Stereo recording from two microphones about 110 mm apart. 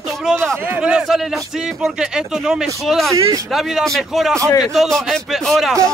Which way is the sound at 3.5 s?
Centre (ahead or behind).